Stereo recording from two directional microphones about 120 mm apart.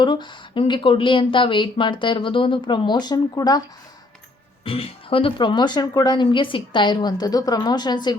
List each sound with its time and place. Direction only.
0.0 s speech: 40° left (ahead or behind)
4.6 s speech: 50° left (ahead or behind)